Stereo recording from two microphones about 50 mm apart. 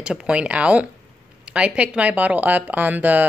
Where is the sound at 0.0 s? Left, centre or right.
Right.